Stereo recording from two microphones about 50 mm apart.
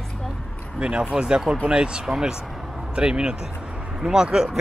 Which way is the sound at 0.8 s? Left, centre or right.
Centre.